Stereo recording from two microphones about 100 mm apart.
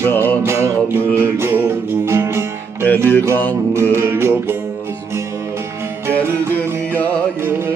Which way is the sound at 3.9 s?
25° right (ahead or behind).